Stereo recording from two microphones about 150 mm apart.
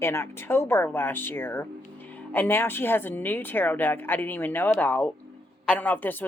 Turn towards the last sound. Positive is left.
turn(degrees=10)  # may be behind; listen again after turning